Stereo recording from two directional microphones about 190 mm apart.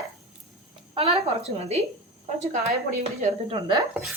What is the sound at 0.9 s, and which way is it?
Speech, 30° right (ahead or behind).